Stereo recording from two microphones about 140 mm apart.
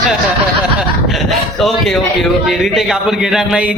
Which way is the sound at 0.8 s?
Centre (ahead or behind).